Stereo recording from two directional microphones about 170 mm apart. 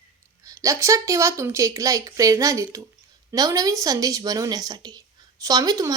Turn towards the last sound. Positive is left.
turn(degrees=-20)  # may be behind; listen again after turning